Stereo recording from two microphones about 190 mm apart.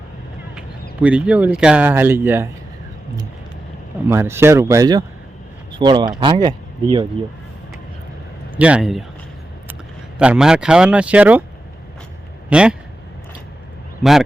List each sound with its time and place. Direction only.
1.0 s speech: 5° right (ahead or behind)
4.1 s speech: 15° right (ahead or behind)
8.5 s speech: 5° right (ahead or behind)
10.2 s speech: 5° right (ahead or behind)
12.5 s speech: 5° right (ahead or behind)
14.0 s speech: centre (ahead or behind)